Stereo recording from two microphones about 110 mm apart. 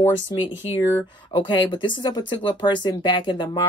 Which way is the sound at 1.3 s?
45° left (ahead or behind).